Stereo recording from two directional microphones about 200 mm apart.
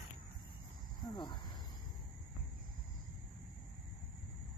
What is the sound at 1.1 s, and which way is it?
Cricket, 20° left (ahead or behind).